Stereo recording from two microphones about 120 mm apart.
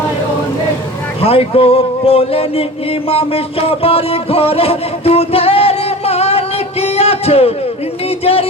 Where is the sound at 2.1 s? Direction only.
55° left (ahead or behind).